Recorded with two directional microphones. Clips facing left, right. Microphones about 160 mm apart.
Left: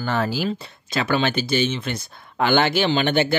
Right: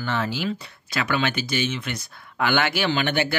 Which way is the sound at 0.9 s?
30° left (ahead or behind).